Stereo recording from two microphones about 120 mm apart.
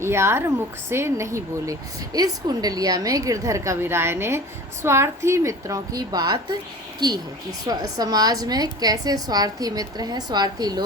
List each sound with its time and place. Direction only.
0.0 s a woman's voice: 20° right (ahead or behind)